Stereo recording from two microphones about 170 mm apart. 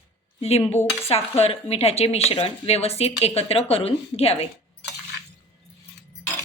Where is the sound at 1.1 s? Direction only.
35° left (ahead or behind).